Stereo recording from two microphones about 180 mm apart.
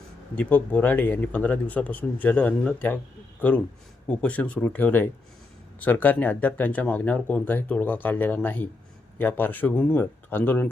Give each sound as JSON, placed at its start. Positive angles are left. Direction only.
{"t": 0.3, "sound": "speech", "side_deg": 10}